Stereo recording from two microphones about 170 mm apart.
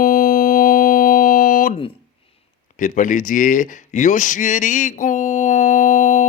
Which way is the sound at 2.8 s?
50° left (ahead or behind).